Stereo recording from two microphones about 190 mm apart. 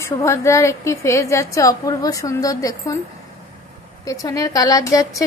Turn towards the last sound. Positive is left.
turn(degrees=20)  # may be behind; listen again after turning